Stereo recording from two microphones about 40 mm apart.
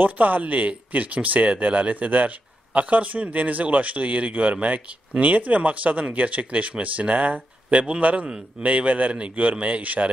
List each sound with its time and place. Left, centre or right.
0.0 s speech: right